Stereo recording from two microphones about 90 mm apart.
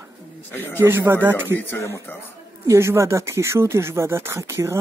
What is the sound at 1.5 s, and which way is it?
Speech, 25° left (ahead or behind).